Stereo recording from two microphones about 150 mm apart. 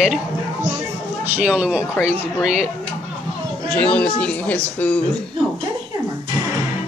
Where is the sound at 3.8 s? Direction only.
10° left (ahead or behind).